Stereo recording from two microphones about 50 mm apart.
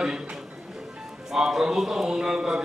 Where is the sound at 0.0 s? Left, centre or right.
Centre.